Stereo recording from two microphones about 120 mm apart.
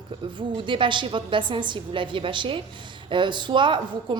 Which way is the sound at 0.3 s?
40° right (ahead or behind).